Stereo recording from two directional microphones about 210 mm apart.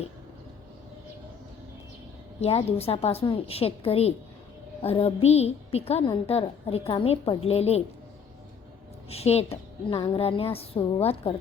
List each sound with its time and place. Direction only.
2.4 s a woman's voice: 30° left (ahead or behind)
9.0 s a woman's voice: 30° left (ahead or behind)